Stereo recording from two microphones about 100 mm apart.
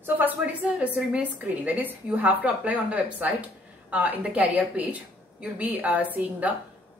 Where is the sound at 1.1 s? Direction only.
15° right (ahead or behind).